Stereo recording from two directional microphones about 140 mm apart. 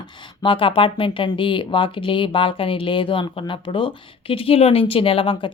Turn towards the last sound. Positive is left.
turn(degrees=40)  # may be behind; listen again after turning